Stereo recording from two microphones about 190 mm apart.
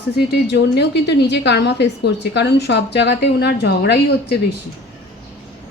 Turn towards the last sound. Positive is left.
turn(degrees=60)  # may be behind; listen again after turning